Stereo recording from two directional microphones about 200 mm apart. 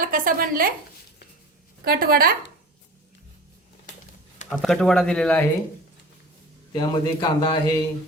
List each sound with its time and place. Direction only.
0.0 s speech: 45° right (ahead or behind)
1.8 s a woman's voice: 50° right (ahead or behind)
4.4 s speech: centre (ahead or behind)
6.7 s a man's voice: 20° left (ahead or behind)